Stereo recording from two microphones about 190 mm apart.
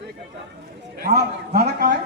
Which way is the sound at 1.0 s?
50° right (ahead or behind).